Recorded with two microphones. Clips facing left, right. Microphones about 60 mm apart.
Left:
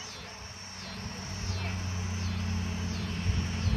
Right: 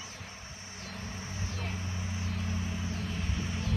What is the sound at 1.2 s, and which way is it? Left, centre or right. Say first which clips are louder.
Vehicle: even; left.